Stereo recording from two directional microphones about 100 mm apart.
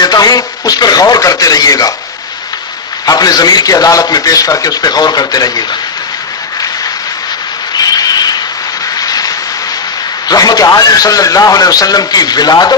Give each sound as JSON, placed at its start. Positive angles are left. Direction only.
{"t": 0.0, "sound": "a man's voice", "side_deg": 40}
{"t": 3.1, "sound": "a man's voice", "side_deg": 40}
{"t": 7.7, "sound": "a sound", "side_deg": 40}
{"t": 10.2, "sound": "a man's voice", "side_deg": 40}